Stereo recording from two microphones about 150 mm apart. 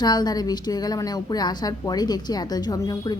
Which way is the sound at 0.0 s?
25° left (ahead or behind).